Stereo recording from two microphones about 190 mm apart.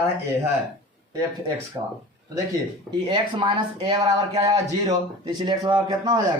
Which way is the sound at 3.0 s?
25° right (ahead or behind).